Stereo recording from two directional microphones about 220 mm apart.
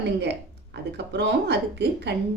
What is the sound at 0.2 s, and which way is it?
Speech, 50° right (ahead or behind).